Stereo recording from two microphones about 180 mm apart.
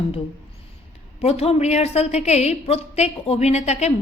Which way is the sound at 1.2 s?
35° left (ahead or behind).